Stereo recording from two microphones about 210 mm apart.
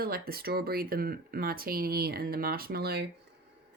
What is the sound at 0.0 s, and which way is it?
Speech, 45° right (ahead or behind).